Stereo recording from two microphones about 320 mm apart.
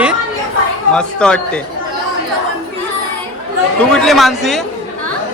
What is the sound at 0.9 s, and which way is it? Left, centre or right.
Speech, centre.